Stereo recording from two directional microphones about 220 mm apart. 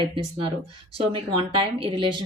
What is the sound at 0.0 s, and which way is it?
A woman's voice, 25° right (ahead or behind).